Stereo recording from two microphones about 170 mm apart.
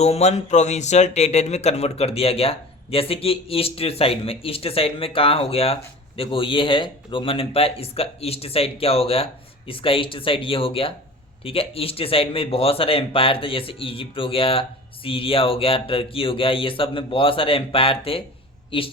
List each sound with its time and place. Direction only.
0.0 s speech: 40° left (ahead or behind)